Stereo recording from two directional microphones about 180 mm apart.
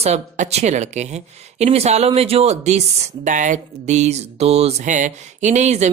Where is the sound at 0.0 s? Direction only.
35° right (ahead or behind).